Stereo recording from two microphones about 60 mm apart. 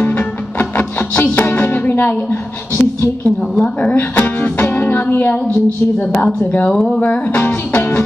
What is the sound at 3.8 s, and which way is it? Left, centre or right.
Music, left.